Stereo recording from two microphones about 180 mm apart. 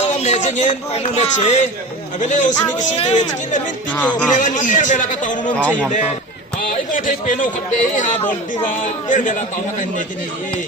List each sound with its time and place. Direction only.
0.1 s speech: 40° left (ahead or behind)
6.7 s speech: 45° left (ahead or behind)
8.2 s speech: 10° left (ahead or behind)
8.8 s speech: 45° left (ahead or behind)